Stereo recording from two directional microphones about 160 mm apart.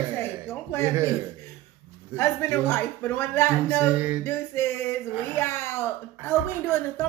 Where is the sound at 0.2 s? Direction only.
10° left (ahead or behind).